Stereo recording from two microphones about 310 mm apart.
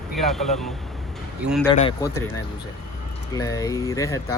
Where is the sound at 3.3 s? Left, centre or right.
Centre.